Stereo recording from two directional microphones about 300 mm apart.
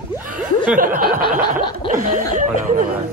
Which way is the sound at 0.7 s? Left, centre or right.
Right.